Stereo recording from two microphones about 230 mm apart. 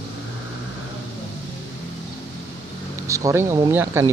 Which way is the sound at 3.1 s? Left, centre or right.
Centre.